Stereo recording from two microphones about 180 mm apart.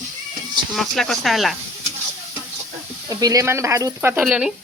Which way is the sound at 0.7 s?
Centre (ahead or behind).